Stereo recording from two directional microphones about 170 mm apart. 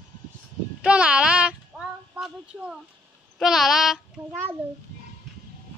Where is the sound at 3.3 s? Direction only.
Centre (ahead or behind).